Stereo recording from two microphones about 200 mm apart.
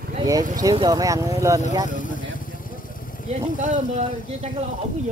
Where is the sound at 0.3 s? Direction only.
20° right (ahead or behind).